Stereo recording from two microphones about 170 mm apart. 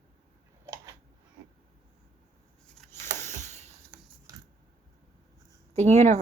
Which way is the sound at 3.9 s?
5° right (ahead or behind).